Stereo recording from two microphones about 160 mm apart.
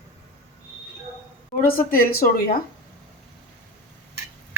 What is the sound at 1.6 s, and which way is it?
Speech, 65° left (ahead or behind).